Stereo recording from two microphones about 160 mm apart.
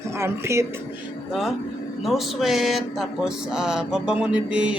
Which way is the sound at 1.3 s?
Centre (ahead or behind).